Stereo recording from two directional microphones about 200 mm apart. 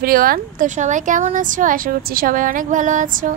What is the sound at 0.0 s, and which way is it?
A woman's voice, 45° right (ahead or behind).